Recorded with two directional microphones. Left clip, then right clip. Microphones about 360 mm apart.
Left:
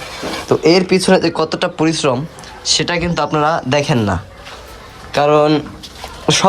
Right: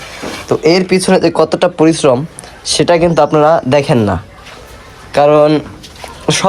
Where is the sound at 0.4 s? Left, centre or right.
Centre.